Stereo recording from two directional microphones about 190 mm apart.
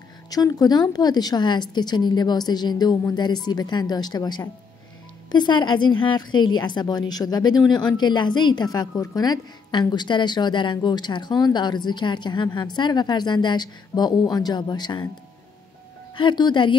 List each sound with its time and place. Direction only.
0.3 s a woman's voice: 20° left (ahead or behind)
16.2 s a woman's voice: 25° left (ahead or behind)